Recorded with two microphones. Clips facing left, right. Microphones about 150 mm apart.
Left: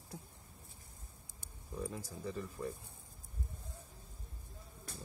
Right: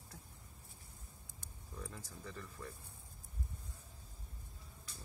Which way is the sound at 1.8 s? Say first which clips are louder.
Left 8 dB; 20° left (ahead or behind).